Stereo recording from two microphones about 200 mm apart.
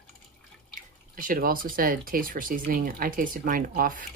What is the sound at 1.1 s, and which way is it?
Speech, 45° right (ahead or behind).